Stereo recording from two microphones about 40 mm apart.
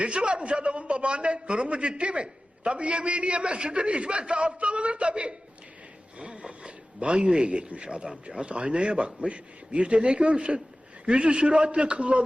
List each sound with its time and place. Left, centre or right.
0.0 s a man's voice: right